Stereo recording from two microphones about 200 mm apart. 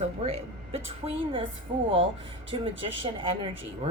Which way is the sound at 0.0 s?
30° right (ahead or behind).